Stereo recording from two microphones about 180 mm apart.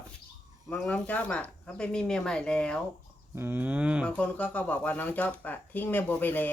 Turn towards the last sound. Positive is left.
turn(degrees=10)  # may be behind; listen again after turning